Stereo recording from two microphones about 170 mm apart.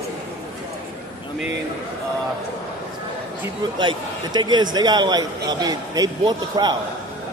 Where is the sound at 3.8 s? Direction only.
30° right (ahead or behind).